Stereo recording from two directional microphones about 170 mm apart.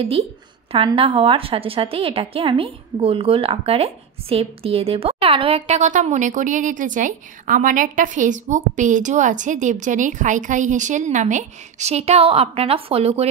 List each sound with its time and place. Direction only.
0.8 s a woman's voice: 35° right (ahead or behind)